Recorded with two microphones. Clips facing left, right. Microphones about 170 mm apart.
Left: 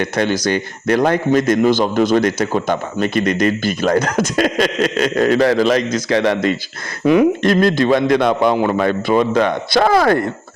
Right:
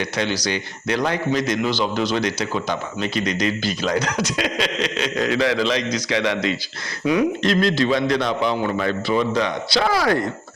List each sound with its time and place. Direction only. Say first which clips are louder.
0.0 s a man's voice: left 6 dB; 50° left (ahead or behind)